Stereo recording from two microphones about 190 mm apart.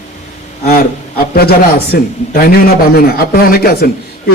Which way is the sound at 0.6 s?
55° left (ahead or behind).